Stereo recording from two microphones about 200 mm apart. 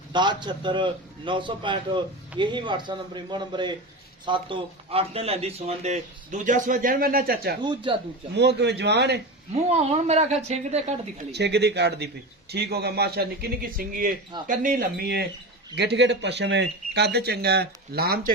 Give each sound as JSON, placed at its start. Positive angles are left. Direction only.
{"t": 0.1, "sound": "a man's voice", "side_deg": -20}
{"t": 7.6, "sound": "a man's voice", "side_deg": -25}
{"t": 8.4, "sound": "a man's voice", "side_deg": -55}
{"t": 9.6, "sound": "speech", "side_deg": -30}
{"t": 11.3, "sound": "a man's voice", "side_deg": -55}